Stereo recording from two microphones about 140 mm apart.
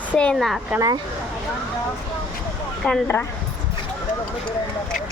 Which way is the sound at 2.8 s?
10° left (ahead or behind).